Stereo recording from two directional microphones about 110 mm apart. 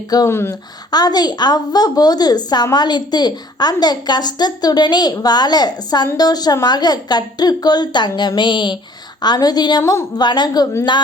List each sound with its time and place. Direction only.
0.3 s speech: 25° left (ahead or behind)
0.9 s a woman's voice: 40° left (ahead or behind)